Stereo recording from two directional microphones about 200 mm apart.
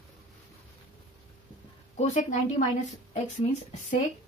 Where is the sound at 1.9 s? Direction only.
35° left (ahead or behind).